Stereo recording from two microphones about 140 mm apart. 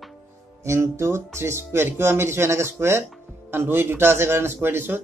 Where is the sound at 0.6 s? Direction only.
20° right (ahead or behind).